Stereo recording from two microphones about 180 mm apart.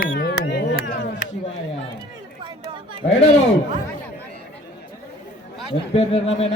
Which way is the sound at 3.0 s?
40° left (ahead or behind).